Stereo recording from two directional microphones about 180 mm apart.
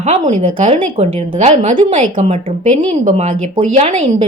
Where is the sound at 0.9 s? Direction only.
40° right (ahead or behind).